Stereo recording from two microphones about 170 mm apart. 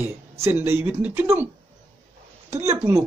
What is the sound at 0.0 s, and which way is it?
Speech, 15° right (ahead or behind).